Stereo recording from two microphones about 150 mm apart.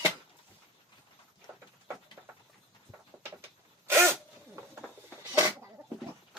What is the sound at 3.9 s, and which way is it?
Sneeze, 20° right (ahead or behind).